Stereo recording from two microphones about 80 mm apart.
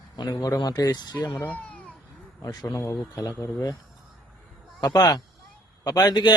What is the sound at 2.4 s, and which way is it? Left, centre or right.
A man's voice, left.